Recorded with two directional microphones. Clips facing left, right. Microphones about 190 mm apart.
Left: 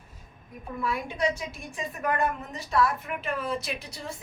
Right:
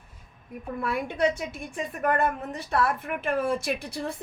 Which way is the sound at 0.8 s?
55° right (ahead or behind).